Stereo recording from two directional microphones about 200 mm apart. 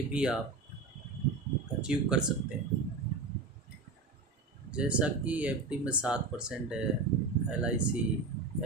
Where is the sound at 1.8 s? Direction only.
5° right (ahead or behind).